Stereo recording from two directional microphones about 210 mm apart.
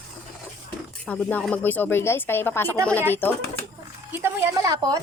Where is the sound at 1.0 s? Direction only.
5° left (ahead or behind).